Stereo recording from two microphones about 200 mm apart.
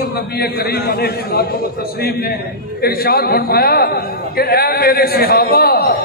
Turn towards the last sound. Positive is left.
turn(degrees=50)  # may be behind; listen again after turning